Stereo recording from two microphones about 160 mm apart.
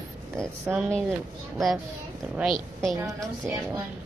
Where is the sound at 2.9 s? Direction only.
20° right (ahead or behind).